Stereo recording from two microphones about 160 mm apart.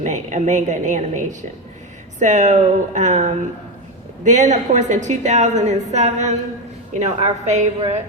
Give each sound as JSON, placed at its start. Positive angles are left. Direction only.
{"t": 0.0, "sound": "a woman's voice", "side_deg": -50}